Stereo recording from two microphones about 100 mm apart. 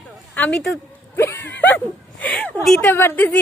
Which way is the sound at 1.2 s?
25° left (ahead or behind).